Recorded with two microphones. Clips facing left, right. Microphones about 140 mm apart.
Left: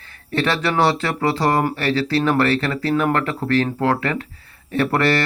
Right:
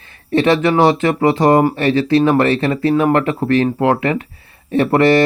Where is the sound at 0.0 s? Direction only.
20° right (ahead or behind).